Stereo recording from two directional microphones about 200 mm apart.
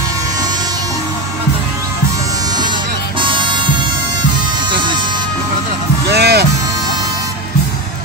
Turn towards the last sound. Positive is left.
turn(degrees=-55)  # may be behind; listen again after turning